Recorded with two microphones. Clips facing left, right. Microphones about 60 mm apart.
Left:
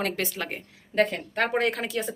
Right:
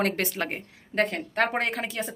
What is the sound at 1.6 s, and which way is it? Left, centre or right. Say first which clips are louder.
Speech: left 2 dB; right.